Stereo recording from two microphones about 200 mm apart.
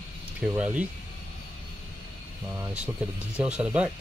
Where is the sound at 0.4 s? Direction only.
5° right (ahead or behind).